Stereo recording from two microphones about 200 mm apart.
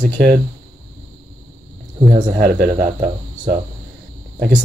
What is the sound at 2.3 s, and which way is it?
Speech, 40° right (ahead or behind).